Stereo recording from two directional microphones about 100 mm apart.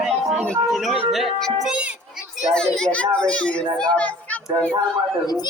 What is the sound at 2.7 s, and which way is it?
A child's voice, 10° left (ahead or behind).